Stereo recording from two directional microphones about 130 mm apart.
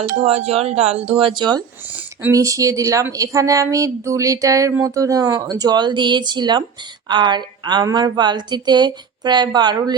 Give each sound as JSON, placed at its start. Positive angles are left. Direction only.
{"t": 0.2, "sound": "speech", "side_deg": -55}
{"t": 1.4, "sound": "a woman's voice", "side_deg": -35}